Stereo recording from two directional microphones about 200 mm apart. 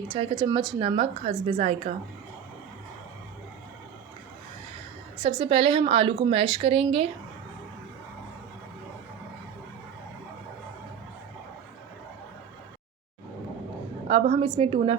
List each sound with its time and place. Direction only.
0.1 s a woman's voice: 25° right (ahead or behind)
5.2 s a woman's voice: 25° right (ahead or behind)
14.1 s a woman's voice: 30° right (ahead or behind)